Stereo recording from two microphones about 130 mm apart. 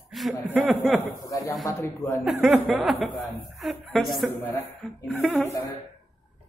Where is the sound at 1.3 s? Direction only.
25° left (ahead or behind).